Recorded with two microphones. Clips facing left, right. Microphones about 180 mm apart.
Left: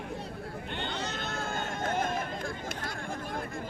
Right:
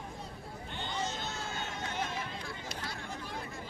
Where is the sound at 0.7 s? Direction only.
70° left (ahead or behind); by 2.3 s 50° left (ahead or behind).